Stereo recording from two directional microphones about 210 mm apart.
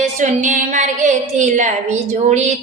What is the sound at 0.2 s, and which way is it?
A woman's voice, 35° right (ahead or behind).